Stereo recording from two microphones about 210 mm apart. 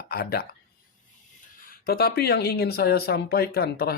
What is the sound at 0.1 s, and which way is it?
Speech, 45° left (ahead or behind).